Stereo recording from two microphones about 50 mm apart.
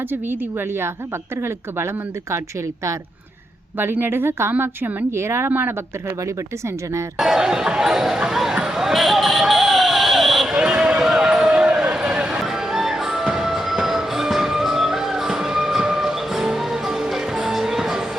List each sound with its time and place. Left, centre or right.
0.1 s speech: right
4.0 s speech: right
5.5 s speech: right
7.2 s speech: centre
8.5 s basketball bounce: centre
10.6 s a sound: centre
12.5 s music: centre